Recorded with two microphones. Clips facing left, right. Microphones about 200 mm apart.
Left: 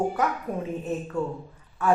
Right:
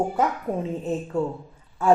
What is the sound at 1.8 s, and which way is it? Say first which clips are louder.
Speech: right 4 dB; 25° right (ahead or behind).